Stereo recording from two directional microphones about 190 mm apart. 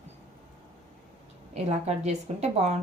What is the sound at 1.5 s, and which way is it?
Speech, 35° right (ahead or behind).